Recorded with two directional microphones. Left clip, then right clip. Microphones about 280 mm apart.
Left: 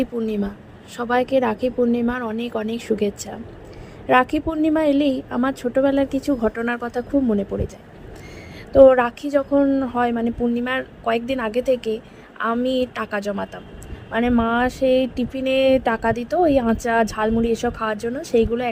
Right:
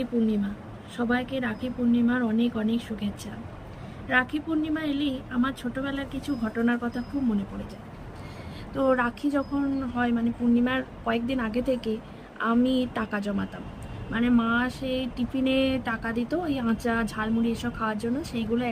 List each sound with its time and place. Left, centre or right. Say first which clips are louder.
0.0 s a woman's voice: left 4 dB; centre
4.1 s a woman's voice: left 8 dB; centre
8.7 s a woman's voice: left 13 dB; centre